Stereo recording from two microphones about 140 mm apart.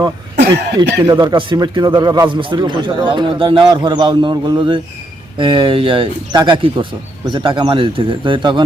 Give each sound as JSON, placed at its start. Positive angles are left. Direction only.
{"t": 0.8, "sound": "a man's voice", "side_deg": -35}